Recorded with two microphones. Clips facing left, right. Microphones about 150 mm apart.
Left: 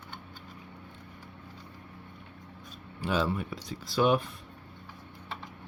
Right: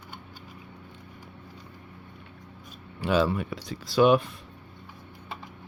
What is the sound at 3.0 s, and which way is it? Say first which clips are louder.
Speech: right 5 dB; 80° right.